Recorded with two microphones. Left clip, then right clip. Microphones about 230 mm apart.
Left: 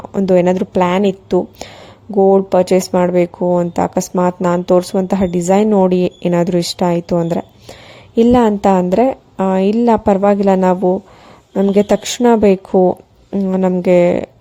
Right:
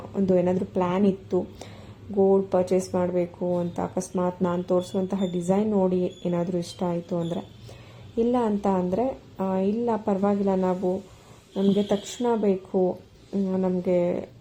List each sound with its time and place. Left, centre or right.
0.1 s speech: left